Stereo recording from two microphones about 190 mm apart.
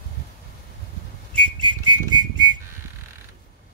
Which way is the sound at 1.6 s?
25° right (ahead or behind).